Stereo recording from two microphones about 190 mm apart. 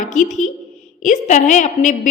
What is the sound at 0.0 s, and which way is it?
A woman's voice, 40° left (ahead or behind).